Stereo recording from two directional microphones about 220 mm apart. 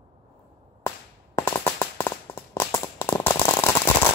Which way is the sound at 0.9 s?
10° left (ahead or behind).